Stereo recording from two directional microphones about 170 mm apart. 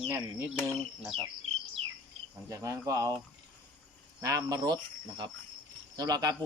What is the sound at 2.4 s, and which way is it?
Cricket, 20° right (ahead or behind).